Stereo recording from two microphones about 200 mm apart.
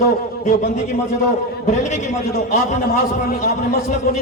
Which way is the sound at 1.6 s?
35° left (ahead or behind).